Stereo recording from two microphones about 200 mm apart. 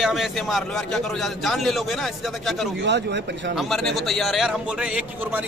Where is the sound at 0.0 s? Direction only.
Centre (ahead or behind).